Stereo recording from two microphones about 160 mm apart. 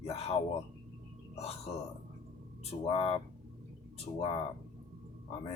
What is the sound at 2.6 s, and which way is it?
Speech, 40° left (ahead or behind).